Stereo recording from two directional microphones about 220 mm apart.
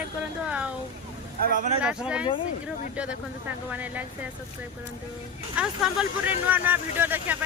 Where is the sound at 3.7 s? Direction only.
5° right (ahead or behind).